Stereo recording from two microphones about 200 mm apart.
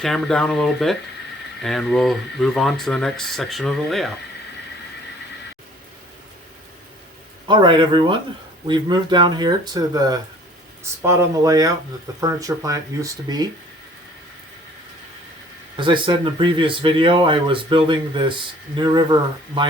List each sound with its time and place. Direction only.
0.0 s speech: centre (ahead or behind)
7.4 s speech: 25° right (ahead or behind)
15.8 s speech: 25° right (ahead or behind)